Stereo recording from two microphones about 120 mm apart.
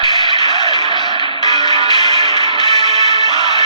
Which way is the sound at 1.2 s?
40° left (ahead or behind).